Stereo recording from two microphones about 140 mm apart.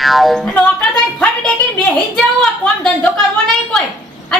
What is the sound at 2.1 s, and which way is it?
Speech, 5° left (ahead or behind).